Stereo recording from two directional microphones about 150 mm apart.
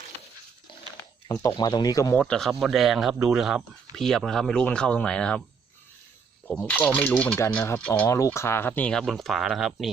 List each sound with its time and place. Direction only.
1.3 s speech: 20° left (ahead or behind)
2.2 s speech: 5° left (ahead or behind)
6.5 s speech: 10° left (ahead or behind)
8.1 s speech: 20° left (ahead or behind); by 9.9 s centre (ahead or behind)